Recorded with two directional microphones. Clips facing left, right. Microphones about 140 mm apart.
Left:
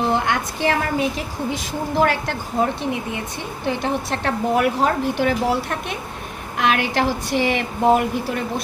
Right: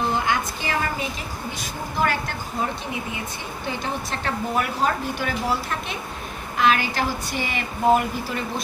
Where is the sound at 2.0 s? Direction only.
80° left.